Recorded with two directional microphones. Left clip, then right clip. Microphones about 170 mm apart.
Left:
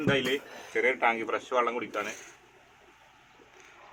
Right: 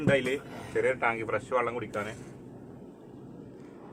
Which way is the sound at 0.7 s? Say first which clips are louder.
Left 2 dB; 40° left (ahead or behind).